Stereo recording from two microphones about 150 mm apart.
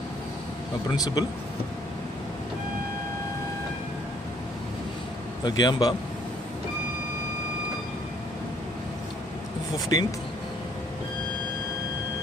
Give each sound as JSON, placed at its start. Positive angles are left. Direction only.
{"t": 0.9, "sound": "a man's voice", "side_deg": 25}
{"t": 5.4, "sound": "a man's voice", "side_deg": 30}
{"t": 9.9, "sound": "a man's voice", "side_deg": 25}